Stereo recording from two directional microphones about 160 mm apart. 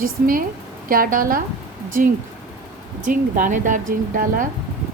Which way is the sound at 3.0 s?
55° right (ahead or behind).